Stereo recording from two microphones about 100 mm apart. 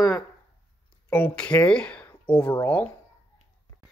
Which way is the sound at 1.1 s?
15° left (ahead or behind).